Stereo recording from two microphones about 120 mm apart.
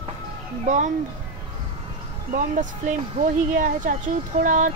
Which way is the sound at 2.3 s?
90° right.